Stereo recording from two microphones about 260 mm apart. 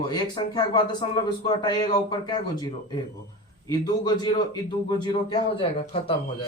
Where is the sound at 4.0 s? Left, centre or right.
Centre.